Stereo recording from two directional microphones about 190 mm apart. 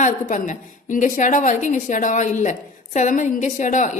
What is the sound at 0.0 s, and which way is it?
A woman's voice, 40° left (ahead or behind).